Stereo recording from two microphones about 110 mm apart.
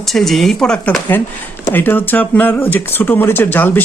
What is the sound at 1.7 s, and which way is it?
Speech, 20° left (ahead or behind).